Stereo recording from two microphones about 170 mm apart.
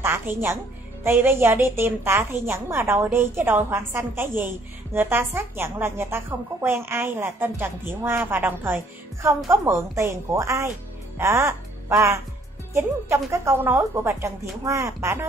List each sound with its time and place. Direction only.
0.0 s a woman's voice: 15° right (ahead or behind)